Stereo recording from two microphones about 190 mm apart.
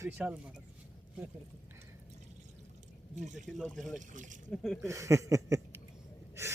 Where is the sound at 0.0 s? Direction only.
10° right (ahead or behind).